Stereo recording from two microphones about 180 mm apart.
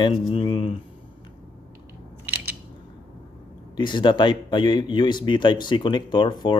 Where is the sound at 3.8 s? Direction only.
25° left (ahead or behind).